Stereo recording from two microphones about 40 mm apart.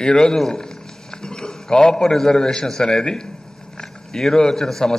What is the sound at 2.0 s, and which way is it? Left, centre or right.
A man's voice, centre.